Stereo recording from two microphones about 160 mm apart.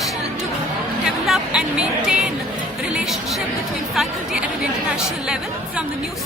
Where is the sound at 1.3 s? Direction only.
5° right (ahead or behind).